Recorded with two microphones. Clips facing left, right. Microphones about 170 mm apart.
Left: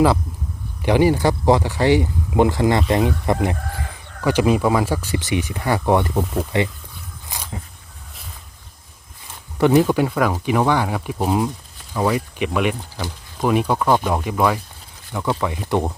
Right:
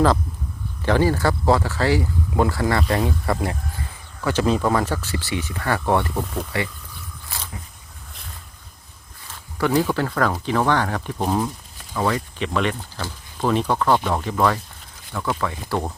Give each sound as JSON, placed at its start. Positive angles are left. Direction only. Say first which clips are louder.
{"t": 0.8, "sound": "speech", "louder": "left 3 dB", "side_deg": 15}
{"t": 7.3, "sound": "a sound", "louder": "left 1 dB", "side_deg": 15}
{"t": 9.6, "sound": "speech", "louder": "left 5 dB", "side_deg": 20}